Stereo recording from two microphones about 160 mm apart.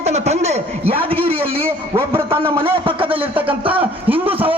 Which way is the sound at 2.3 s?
35° right (ahead or behind).